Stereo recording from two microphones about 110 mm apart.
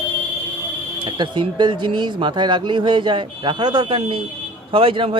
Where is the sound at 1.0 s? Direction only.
45° right (ahead or behind).